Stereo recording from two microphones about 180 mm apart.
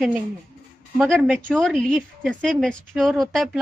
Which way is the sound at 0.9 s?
Centre (ahead or behind).